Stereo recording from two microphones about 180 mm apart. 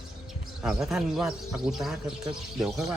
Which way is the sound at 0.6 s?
5° right (ahead or behind).